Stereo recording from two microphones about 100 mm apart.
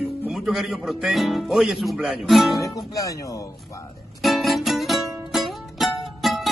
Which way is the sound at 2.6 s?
35° left (ahead or behind).